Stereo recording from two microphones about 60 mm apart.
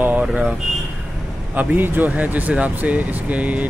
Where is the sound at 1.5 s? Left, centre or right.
Right.